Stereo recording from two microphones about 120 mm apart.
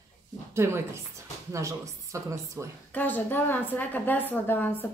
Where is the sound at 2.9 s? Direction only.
15° left (ahead or behind).